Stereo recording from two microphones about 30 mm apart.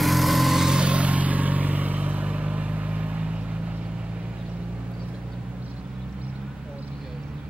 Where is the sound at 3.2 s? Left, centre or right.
Right.